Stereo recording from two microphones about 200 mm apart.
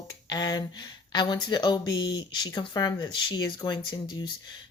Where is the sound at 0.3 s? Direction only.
20° left (ahead or behind).